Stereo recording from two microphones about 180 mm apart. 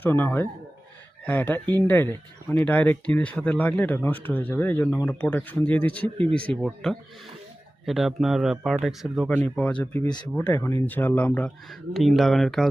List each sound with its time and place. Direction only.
0.0 s speech: 10° left (ahead or behind)
7.9 s speech: centre (ahead or behind)